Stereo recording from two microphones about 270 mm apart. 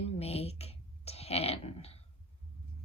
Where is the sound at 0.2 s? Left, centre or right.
Left.